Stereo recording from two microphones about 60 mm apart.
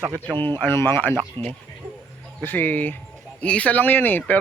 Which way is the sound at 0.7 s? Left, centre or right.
Left.